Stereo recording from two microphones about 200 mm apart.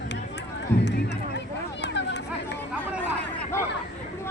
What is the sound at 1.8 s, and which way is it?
Run, 60° left (ahead or behind).